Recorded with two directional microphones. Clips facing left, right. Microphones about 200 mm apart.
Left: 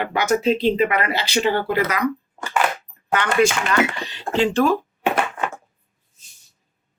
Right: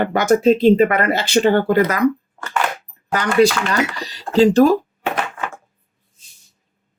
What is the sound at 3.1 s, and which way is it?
Speech, 35° right (ahead or behind).